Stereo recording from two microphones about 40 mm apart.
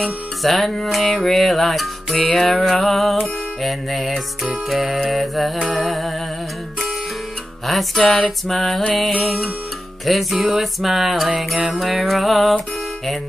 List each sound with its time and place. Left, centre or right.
0.4 s music: centre
2.1 s music: centre
2.7 s music: centre
7.6 s music: centre